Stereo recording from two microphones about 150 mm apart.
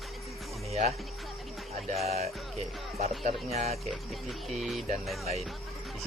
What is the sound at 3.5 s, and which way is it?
Speech, 45° right (ahead or behind).